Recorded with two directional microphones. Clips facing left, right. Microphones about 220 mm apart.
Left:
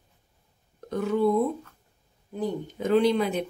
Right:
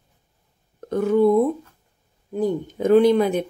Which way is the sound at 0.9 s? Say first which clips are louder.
Right 7 dB; 50° right (ahead or behind).